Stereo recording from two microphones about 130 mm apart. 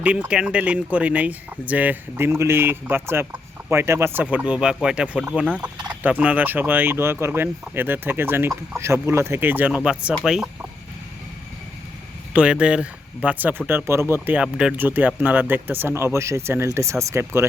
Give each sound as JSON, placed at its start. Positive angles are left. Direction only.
{"t": 0.0, "sound": "speech", "side_deg": -10}
{"t": 12.3, "sound": "speech", "side_deg": -10}